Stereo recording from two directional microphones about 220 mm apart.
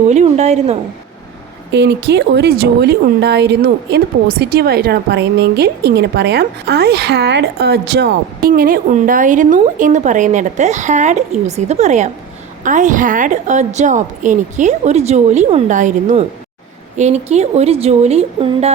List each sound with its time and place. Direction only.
0.1 s a woman's voice: 30° right (ahead or behind)
1.7 s a woman's voice: 50° right (ahead or behind); by 18.7 s 30° right (ahead or behind)